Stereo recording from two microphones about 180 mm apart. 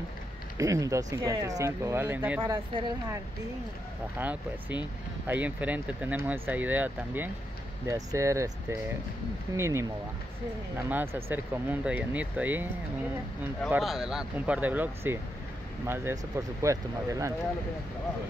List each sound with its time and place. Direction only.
0.6 s speech: 20° right (ahead or behind)
2.4 s speech: 25° right (ahead or behind)
4.2 s speech: 10° right (ahead or behind)
10.9 s speech: 10° right (ahead or behind)
13.7 s speech: centre (ahead or behind)